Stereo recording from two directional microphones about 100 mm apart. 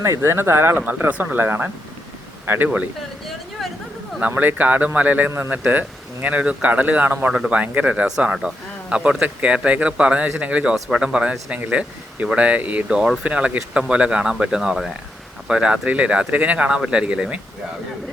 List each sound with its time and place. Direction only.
0.0 s speech: 30° right (ahead or behind)
4.2 s speech: 15° right (ahead or behind)